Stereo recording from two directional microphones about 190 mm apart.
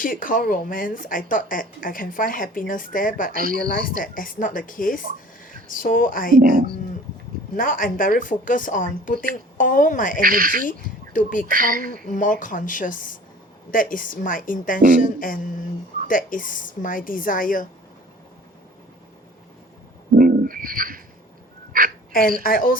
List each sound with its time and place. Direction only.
0.0 s a woman's voice: 45° left (ahead or behind)
3.3 s a woman's voice: 50° right (ahead or behind)
3.7 s a woman's voice: 45° left (ahead or behind)
6.4 s a woman's voice: 50° right (ahead or behind)
7.5 s a woman's voice: 45° left (ahead or behind)
10.2 s a woman's voice: 50° right (ahead or behind)
11.1 s speech: 45° left (ahead or behind)
11.5 s a woman's voice: 50° right (ahead or behind)
12.0 s a woman's voice: 45° left (ahead or behind)
20.1 s bird: 50° right (ahead or behind)
21.7 s a sound: 50° right (ahead or behind)
22.4 s a woman's voice: 50° left (ahead or behind)